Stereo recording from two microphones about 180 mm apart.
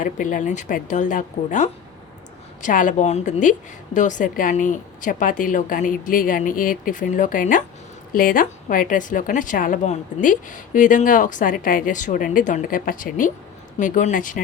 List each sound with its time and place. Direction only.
0.0 s a woman's voice: 45° left (ahead or behind)